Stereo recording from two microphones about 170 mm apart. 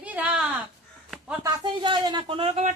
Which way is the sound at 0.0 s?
10° right (ahead or behind).